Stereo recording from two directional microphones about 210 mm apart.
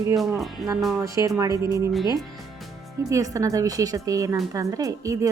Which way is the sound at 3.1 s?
15° right (ahead or behind).